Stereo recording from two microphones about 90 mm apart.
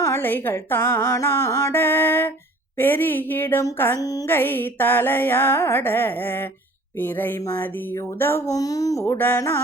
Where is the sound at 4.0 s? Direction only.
45° left (ahead or behind).